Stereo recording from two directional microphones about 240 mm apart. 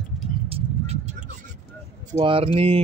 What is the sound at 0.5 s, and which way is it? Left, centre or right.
Vehicle, right.